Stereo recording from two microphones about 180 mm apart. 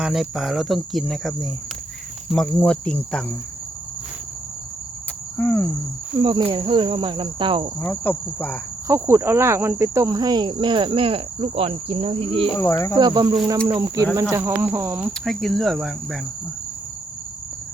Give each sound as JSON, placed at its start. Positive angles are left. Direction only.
{"t": 0.0, "sound": "cricket", "side_deg": 0}
{"t": 2.6, "sound": "cricket", "side_deg": 5}
{"t": 5.4, "sound": "cricket", "side_deg": 10}
{"t": 6.2, "sound": "cricket", "side_deg": -25}
{"t": 7.8, "sound": "cricket", "side_deg": 10}
{"t": 8.9, "sound": "cricket", "side_deg": -15}
{"t": 12.5, "sound": "cricket", "side_deg": 15}
{"t": 13.0, "sound": "cricket", "side_deg": -25}
{"t": 14.2, "sound": "speech", "side_deg": -15}